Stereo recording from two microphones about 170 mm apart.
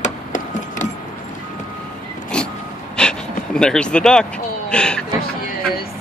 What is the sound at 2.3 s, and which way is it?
Vehicle, 5° left (ahead or behind).